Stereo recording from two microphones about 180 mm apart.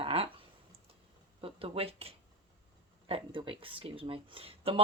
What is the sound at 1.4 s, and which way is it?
Speech, 30° right (ahead or behind).